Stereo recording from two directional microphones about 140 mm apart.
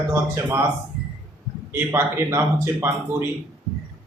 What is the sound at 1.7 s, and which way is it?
Speech, 20° right (ahead or behind).